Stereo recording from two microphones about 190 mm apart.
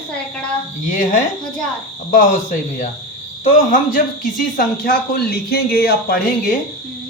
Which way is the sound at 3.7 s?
45° left (ahead or behind).